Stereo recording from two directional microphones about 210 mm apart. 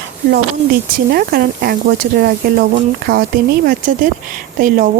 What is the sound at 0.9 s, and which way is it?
Speech, 45° right (ahead or behind).